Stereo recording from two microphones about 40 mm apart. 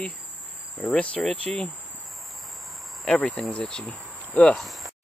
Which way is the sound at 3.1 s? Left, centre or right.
Left.